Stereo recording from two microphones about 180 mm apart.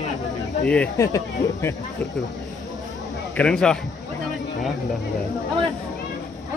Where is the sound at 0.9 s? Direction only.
20° left (ahead or behind).